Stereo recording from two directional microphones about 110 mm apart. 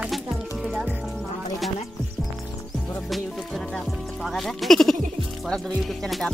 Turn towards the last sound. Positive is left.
turn(degrees=0)  # may be behind; listen again after turning